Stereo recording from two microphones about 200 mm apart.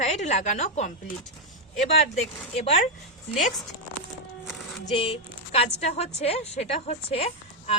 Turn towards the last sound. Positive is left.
turn(degrees=30)  # may be behind; listen again after turning